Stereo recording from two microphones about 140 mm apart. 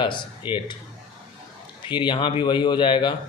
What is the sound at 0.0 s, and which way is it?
Speech, 35° left (ahead or behind).